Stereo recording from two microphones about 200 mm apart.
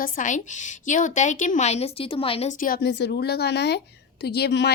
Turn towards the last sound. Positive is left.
turn(degrees=55)  # may be behind; listen again after turning